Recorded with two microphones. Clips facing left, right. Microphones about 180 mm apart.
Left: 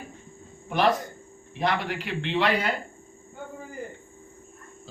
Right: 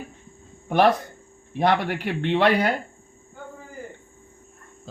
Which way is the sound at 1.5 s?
60° right (ahead or behind).